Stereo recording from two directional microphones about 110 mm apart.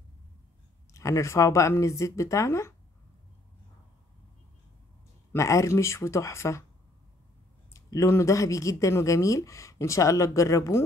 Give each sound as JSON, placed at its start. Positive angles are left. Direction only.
{"t": 0.9, "sound": "speech", "side_deg": 30}
{"t": 5.3, "sound": "speech", "side_deg": 25}
{"t": 7.7, "sound": "speech", "side_deg": 30}